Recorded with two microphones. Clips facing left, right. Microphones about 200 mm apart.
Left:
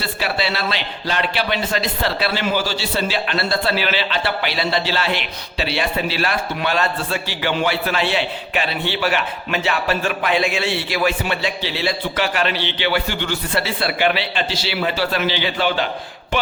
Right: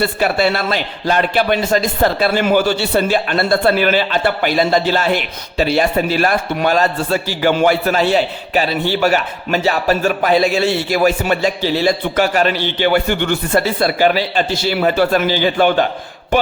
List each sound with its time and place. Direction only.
0.0 s a man's voice: 50° right (ahead or behind)